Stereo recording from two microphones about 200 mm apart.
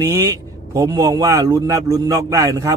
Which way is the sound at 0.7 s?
15° right (ahead or behind).